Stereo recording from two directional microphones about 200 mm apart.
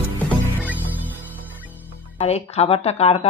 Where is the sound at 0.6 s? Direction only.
10° right (ahead or behind).